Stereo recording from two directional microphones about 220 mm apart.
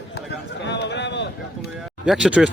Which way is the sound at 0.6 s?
50° left (ahead or behind).